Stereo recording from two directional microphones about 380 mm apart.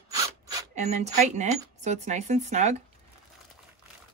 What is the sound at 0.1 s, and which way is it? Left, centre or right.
Speech, centre.